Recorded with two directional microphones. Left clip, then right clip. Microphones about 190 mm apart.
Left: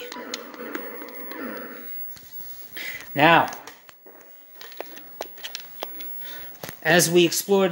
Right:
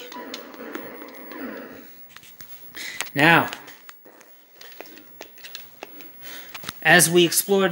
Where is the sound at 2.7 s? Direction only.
20° right (ahead or behind).